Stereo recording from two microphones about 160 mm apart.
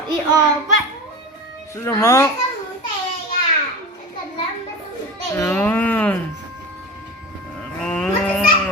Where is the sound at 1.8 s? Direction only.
15° left (ahead or behind).